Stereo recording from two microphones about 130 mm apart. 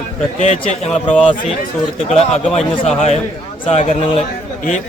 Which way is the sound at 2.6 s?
60° left (ahead or behind).